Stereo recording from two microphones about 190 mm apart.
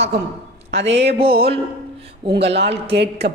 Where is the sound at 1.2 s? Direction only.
30° right (ahead or behind).